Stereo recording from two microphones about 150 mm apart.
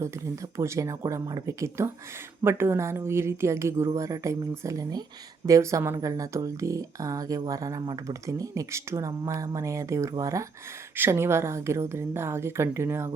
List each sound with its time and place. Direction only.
0.5 s a woman's voice: 20° right (ahead or behind)